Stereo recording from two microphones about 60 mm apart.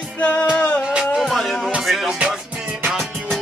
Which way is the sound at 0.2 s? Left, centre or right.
Left.